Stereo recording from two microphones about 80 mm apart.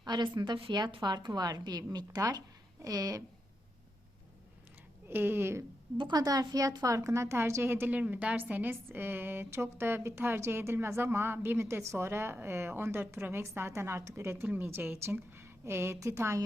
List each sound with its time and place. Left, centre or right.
0.0 s a woman's voice: right
5.0 s a woman's voice: right
6.0 s a woman's voice: right
6.2 s a woman's voice: right